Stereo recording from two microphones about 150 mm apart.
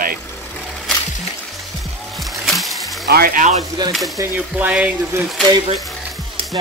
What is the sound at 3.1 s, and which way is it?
Speech, 80° right.